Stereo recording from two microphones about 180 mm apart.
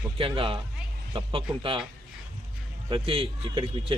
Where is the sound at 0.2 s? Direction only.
30° right (ahead or behind).